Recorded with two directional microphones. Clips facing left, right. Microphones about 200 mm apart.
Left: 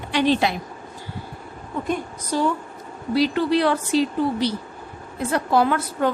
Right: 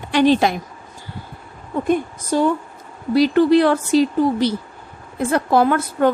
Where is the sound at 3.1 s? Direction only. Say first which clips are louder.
Right 6 dB; 50° right (ahead or behind).